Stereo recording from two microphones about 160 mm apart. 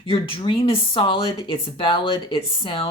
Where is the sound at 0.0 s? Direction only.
35° left (ahead or behind).